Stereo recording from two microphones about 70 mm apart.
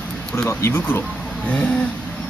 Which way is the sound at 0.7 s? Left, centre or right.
Left.